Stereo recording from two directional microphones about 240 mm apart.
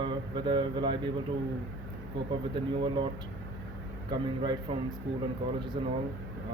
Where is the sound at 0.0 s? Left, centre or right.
Centre.